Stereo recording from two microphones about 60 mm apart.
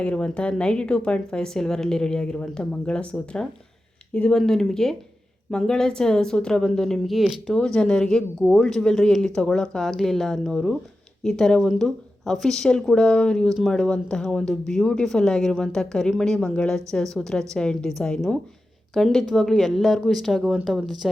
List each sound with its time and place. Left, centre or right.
0.0 s speech: centre
4.4 s speech: centre
7.5 s speech: centre